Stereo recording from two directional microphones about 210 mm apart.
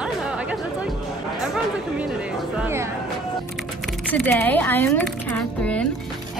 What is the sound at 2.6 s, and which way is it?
Speech, 10° right (ahead or behind).